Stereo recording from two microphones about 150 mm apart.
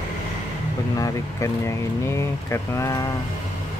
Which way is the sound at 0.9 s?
20° left (ahead or behind).